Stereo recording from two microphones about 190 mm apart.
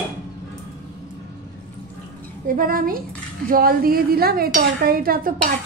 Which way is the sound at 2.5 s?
50° right (ahead or behind).